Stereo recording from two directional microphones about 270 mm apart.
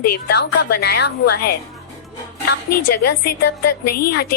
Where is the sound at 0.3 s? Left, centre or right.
Left.